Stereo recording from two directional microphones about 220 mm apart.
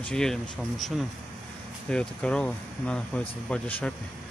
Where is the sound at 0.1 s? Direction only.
Centre (ahead or behind).